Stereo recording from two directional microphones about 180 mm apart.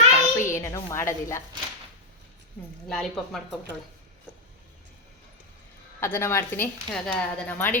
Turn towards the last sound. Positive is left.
turn(degrees=10)  # may be behind; listen again after turning